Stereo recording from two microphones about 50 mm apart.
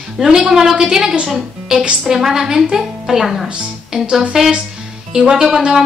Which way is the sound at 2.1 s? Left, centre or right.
Centre.